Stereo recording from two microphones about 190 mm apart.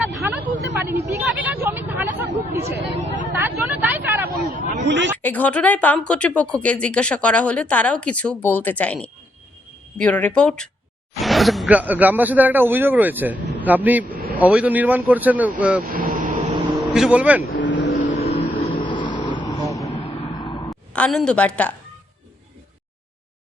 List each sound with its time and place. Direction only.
0.0 s vehicle: 10° right (ahead or behind)
1.6 s hubbub: 10° right (ahead or behind)
3.3 s vehicle: 10° right (ahead or behind)
4.4 s a sound: 35° left (ahead or behind)
4.8 s a sound: 65° right (ahead or behind)
5.2 s speech: 10° left (ahead or behind); by 15.8 s 5° right (ahead or behind)
15.8 s vehicle: 50° right (ahead or behind)
16.7 s speech: centre (ahead or behind)
17.5 s vehicle: 70° left (ahead or behind)
18.0 s vehicle: 35° left (ahead or behind)
20.3 s a sound: 20° left (ahead or behind)
20.7 s a woman's voice: 5° left (ahead or behind)